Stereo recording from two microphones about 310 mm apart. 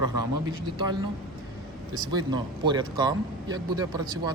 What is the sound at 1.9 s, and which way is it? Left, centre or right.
Speech, centre.